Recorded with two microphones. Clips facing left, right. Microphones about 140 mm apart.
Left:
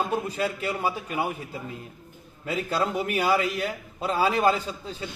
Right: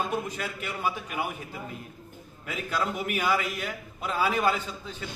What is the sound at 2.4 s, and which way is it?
A man's voice, 35° left (ahead or behind).